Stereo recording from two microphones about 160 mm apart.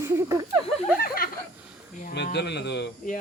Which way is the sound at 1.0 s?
65° left (ahead or behind).